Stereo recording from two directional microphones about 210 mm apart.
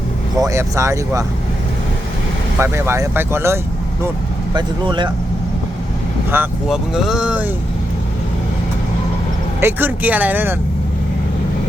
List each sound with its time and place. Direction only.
0.3 s speech: 15° right (ahead or behind)
2.6 s speech: 10° right (ahead or behind)
6.3 s speech: 5° right (ahead or behind)
9.6 s speech: 10° right (ahead or behind)